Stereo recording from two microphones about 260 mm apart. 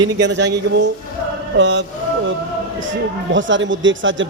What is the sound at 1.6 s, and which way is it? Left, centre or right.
Speech, right.